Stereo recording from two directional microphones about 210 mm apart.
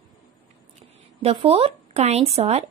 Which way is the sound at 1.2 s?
25° right (ahead or behind).